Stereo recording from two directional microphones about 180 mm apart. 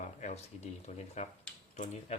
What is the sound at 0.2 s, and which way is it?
Speech, 40° left (ahead or behind).